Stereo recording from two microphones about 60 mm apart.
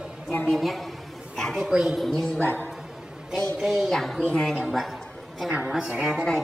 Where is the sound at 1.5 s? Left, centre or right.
Centre.